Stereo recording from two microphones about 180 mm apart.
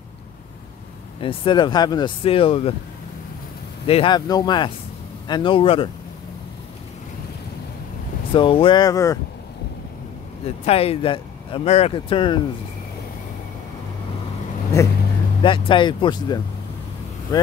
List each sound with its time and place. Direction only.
1.2 s speech: 30° left (ahead or behind)
3.8 s speech: 30° left (ahead or behind)
8.3 s speech: 30° left (ahead or behind)
10.4 s speech: 35° left (ahead or behind)
14.8 s speech: 15° left (ahead or behind)
15.4 s speech: 25° left (ahead or behind)